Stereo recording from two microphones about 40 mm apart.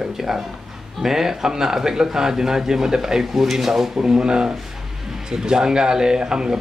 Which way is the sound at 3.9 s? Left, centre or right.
Centre.